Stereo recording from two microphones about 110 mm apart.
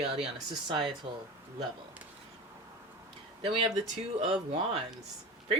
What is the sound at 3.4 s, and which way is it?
Speech, 60° right (ahead or behind).